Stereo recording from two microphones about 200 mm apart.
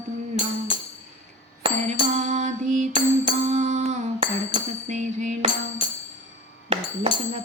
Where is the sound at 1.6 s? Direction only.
35° right (ahead or behind).